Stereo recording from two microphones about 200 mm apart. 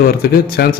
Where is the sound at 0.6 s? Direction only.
50° left (ahead or behind).